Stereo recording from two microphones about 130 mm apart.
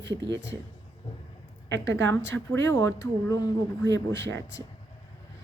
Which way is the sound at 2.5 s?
20° left (ahead or behind).